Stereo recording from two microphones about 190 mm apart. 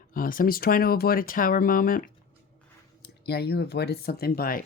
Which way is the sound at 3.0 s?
60° left (ahead or behind).